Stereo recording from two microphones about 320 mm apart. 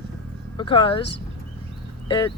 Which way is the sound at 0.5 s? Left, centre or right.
Centre.